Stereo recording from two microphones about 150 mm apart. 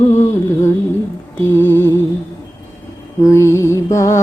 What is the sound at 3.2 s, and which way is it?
Music, 20° left (ahead or behind).